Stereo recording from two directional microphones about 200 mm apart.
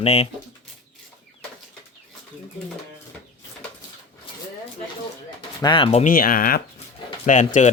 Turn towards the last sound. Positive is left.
turn(degrees=35)  # may be behind; listen again after turning